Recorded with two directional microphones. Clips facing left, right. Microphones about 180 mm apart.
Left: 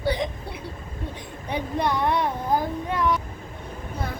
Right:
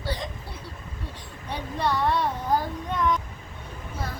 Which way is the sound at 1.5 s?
15° left (ahead or behind).